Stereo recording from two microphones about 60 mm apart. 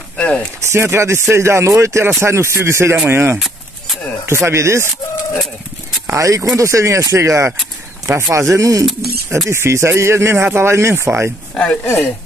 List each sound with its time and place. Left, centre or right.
0.6 s speech: right
6.0 s speech: right
9.5 s speech: right
11.5 s speech: centre
11.8 s speech: left